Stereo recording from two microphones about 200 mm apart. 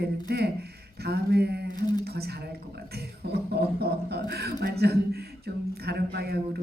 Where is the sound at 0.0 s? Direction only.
55° right (ahead or behind).